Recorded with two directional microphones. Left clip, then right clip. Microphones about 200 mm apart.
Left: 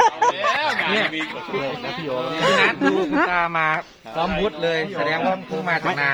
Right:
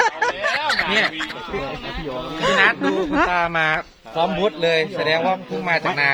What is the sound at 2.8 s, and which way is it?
Speech, 5° left (ahead or behind).